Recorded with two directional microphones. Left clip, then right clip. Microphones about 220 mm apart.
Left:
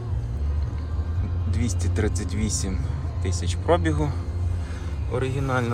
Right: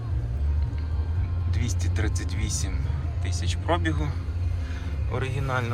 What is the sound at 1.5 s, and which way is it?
Speech, 30° left (ahead or behind).